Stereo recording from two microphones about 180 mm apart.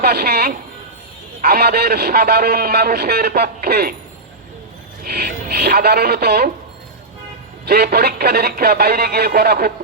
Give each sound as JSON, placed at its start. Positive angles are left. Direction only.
{"t": 0.0, "sound": "a man's voice", "side_deg": -60}
{"t": 5.0, "sound": "speech", "side_deg": -60}
{"t": 7.7, "sound": "a man's voice", "side_deg": -60}